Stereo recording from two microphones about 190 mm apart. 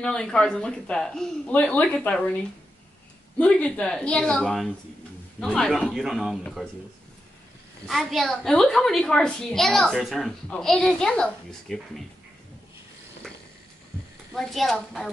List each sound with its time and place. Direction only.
0.0 s a woman's voice: 5° left (ahead or behind)
3.3 s a woman's voice: 5° left (ahead or behind)
7.9 s a woman's voice: centre (ahead or behind)
14.3 s a woman's voice: centre (ahead or behind)